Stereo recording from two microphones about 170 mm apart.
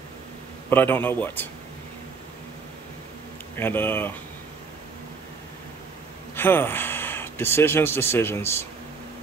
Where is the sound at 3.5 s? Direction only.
10° left (ahead or behind).